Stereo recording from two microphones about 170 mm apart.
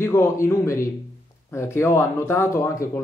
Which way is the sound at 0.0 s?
15° left (ahead or behind).